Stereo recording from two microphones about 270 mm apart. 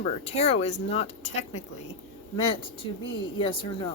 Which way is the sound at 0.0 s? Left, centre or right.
Left.